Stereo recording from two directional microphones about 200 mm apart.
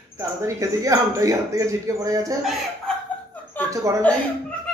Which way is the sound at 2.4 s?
Centre (ahead or behind).